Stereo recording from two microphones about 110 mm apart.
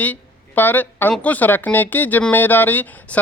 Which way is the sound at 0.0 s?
15° left (ahead or behind).